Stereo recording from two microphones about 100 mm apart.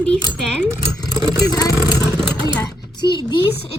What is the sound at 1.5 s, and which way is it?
Speech, 40° left (ahead or behind).